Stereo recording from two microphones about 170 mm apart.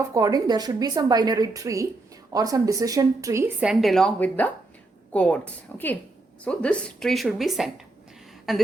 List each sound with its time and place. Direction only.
0.0 s a woman's voice: 20° right (ahead or behind); by 8.6 s centre (ahead or behind)